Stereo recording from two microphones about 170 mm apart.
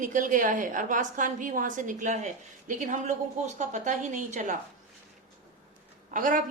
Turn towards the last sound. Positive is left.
turn(degrees=-50)  # may be behind; listen again after turning